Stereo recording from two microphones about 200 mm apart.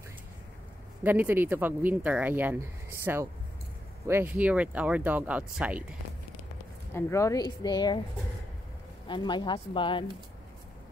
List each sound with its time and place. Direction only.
1.0 s speech: 10° right (ahead or behind)
6.9 s speech: 15° left (ahead or behind)
9.0 s speech: 25° left (ahead or behind)